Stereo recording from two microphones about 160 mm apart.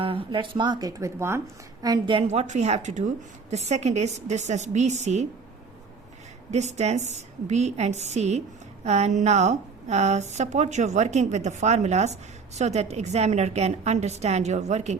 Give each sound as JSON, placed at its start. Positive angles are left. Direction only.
{"t": 0.0, "sound": "a woman's voice", "side_deg": -35}
{"t": 1.8, "sound": "a woman's voice", "side_deg": -25}
{"t": 2.2, "sound": "speech", "side_deg": -45}
{"t": 6.5, "sound": "speech", "side_deg": -45}